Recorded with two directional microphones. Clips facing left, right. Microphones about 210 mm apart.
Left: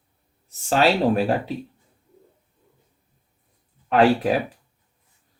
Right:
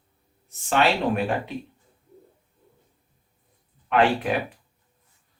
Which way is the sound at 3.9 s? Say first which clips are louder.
Left 4 dB; 35° left (ahead or behind).